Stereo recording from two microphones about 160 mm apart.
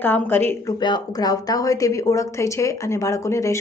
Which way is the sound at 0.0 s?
15° left (ahead or behind).